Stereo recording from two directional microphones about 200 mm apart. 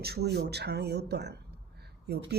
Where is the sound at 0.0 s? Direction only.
55° right (ahead or behind).